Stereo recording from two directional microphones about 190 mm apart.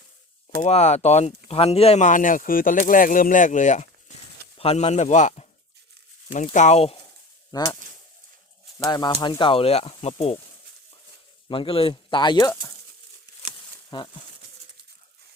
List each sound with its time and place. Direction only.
0.6 s speech: 35° left (ahead or behind)
7.5 s speech: 20° left (ahead or behind)
8.8 s speech: 20° left (ahead or behind)
11.4 s speech: 30° left (ahead or behind)
13.9 s speech: 25° left (ahead or behind)